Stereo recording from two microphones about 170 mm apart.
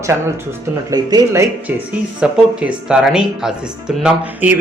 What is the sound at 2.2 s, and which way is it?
Speech, 5° right (ahead or behind).